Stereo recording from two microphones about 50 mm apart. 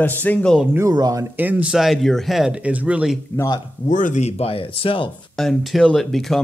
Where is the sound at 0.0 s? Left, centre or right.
Left.